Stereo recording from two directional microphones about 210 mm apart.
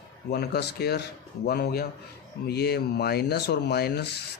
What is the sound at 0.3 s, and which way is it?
Speech, 50° left (ahead or behind).